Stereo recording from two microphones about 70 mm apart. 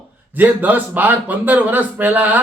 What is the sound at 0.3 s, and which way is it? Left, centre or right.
A man's voice, right.